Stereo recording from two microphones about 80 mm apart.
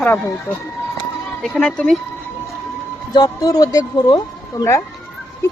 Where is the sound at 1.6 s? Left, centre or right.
Centre.